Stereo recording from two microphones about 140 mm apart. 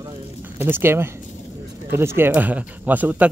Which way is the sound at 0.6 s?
15° right (ahead or behind).